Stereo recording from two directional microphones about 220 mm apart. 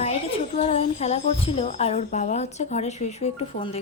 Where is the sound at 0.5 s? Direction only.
30° left (ahead or behind).